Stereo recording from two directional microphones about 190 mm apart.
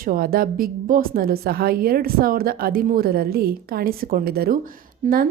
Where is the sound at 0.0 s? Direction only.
50° right (ahead or behind).